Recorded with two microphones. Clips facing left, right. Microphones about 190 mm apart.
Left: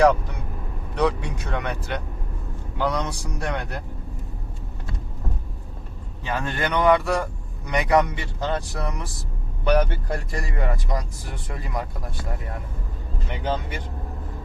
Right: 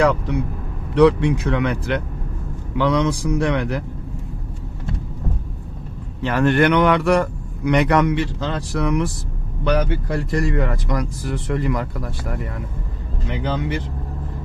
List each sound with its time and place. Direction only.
0.0 s speech: 70° right (ahead or behind)
2.7 s a man's voice: 90° right
6.2 s speech: 70° right (ahead or behind)